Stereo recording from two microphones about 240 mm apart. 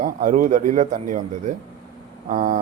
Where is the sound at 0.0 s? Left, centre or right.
Right.